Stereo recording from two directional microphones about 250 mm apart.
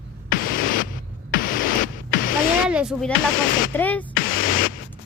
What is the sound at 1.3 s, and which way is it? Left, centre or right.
Music, left.